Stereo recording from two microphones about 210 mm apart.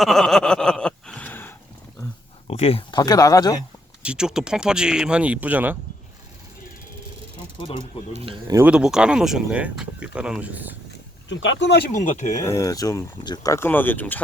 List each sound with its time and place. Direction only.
0.0 s a sound: centre (ahead or behind)
2.5 s speech: 30° left (ahead or behind)
4.0 s speech: 5° right (ahead or behind)
7.6 s speech: 25° left (ahead or behind)
8.1 s speech: 25° right (ahead or behind)
8.5 s speech: 5° right (ahead or behind)
11.3 s speech: 60° left (ahead or behind)
11.9 s speech: 35° left (ahead or behind)
12.4 s speech: 15° left (ahead or behind)